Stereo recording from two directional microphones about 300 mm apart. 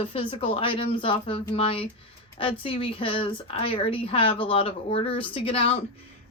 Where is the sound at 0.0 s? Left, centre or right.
Centre.